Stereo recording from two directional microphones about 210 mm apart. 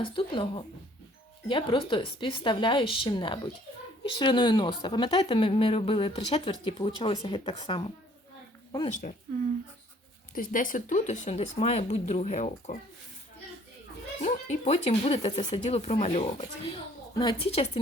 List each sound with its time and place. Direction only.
0.0 s a woman's voice: 25° left (ahead or behind)
9.0 s speech: 40° left (ahead or behind)
10.3 s speech: 40° left (ahead or behind)
14.2 s a woman's voice: 35° left (ahead or behind)